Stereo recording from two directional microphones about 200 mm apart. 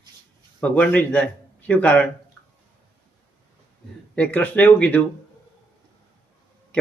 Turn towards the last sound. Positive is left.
turn(degrees=5)  # may be behind; listen again after turning